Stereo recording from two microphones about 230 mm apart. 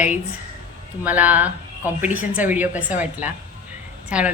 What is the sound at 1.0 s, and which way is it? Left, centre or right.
A woman's voice, centre.